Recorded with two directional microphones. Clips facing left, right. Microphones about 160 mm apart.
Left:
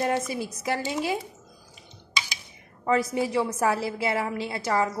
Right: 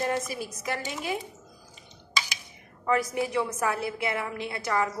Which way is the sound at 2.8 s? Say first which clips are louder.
Left 2 dB; 30° left (ahead or behind).